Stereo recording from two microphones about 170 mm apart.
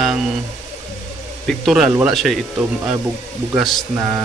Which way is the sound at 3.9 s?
15° right (ahead or behind).